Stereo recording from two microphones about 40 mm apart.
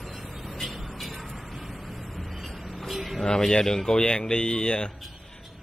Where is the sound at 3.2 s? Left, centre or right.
Centre.